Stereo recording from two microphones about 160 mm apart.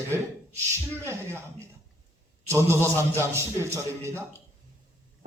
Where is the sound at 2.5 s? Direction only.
15° right (ahead or behind).